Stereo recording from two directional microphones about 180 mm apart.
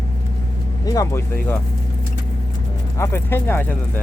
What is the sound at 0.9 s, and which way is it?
Speech, 15° left (ahead or behind).